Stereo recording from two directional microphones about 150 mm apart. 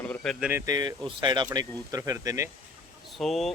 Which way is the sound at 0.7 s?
30° right (ahead or behind).